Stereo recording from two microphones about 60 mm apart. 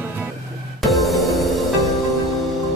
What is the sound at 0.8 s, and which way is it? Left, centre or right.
Music, centre.